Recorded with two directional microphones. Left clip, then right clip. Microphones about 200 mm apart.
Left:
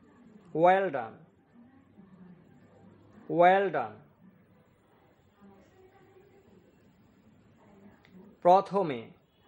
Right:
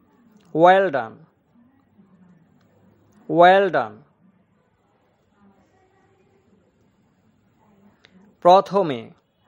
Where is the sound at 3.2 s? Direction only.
40° right (ahead or behind).